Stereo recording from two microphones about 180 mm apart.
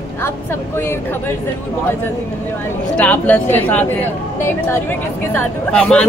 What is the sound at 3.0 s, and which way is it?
Speech, 10° left (ahead or behind).